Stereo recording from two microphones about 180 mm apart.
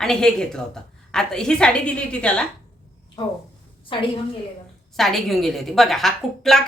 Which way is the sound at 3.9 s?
25° left (ahead or behind).